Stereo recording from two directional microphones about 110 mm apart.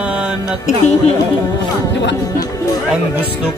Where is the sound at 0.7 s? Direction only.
90° left.